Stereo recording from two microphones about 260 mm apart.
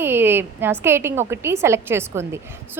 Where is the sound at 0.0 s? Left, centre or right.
Centre.